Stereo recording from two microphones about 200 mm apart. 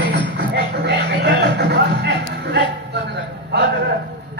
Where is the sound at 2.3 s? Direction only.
55° right (ahead or behind).